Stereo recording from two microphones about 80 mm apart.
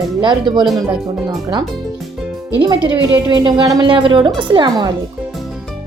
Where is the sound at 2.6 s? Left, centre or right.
Right.